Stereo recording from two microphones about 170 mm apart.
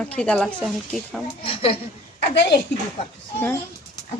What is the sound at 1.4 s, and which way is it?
Speech, 30° left (ahead or behind).